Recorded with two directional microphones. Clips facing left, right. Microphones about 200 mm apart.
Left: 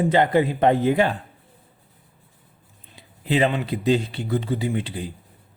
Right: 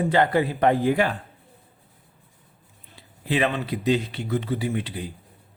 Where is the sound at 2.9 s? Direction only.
20° left (ahead or behind).